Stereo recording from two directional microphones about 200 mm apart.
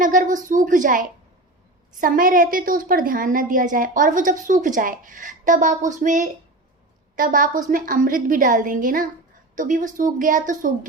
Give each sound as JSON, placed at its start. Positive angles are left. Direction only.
{"t": 0.0, "sound": "a woman's voice", "side_deg": -40}